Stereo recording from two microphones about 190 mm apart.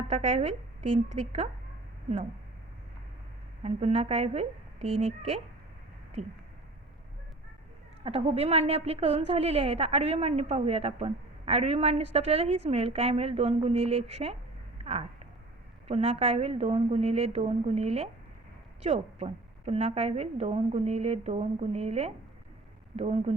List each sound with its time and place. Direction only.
0.1 s a woman's voice: 35° right (ahead or behind)
3.6 s a woman's voice: 35° right (ahead or behind)
8.0 s a woman's voice: 30° right (ahead or behind)
15.9 s a woman's voice: 35° right (ahead or behind)